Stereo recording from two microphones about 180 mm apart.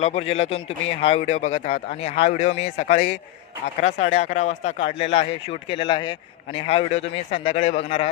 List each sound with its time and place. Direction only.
0.0 s speech: 35° left (ahead or behind)